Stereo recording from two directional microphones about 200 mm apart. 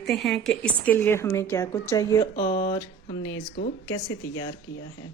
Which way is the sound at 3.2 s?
70° left (ahead or behind).